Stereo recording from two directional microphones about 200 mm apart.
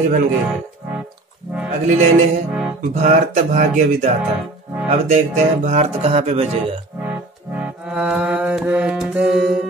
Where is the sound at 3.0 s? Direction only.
40° right (ahead or behind).